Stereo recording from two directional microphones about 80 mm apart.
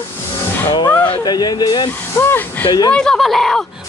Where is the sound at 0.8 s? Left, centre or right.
Centre.